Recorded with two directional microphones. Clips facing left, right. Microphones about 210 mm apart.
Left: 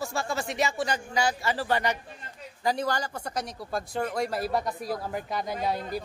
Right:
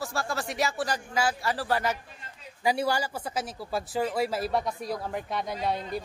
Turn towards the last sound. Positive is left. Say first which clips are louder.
# left 1 dB
turn(degrees=0)  # may be behind; listen again after turning